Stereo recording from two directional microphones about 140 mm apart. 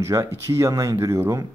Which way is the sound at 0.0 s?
20° right (ahead or behind).